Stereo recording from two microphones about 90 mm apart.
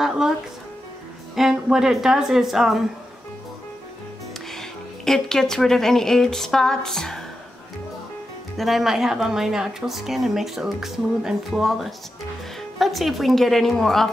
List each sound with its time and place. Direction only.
0.0 s music: 5° right (ahead or behind)
1.3 s a woman's voice: 5° right (ahead or behind)
4.5 s speech: 5° left (ahead or behind)
8.5 s a woman's voice: centre (ahead or behind)